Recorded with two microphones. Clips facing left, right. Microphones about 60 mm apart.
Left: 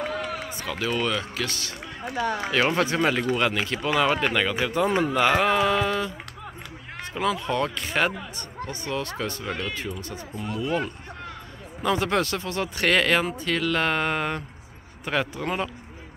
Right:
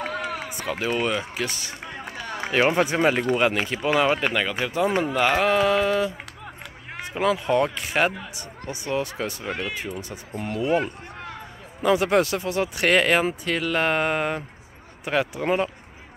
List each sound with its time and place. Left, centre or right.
0.0 s speech: centre
10.3 s speech: right
10.6 s speech: centre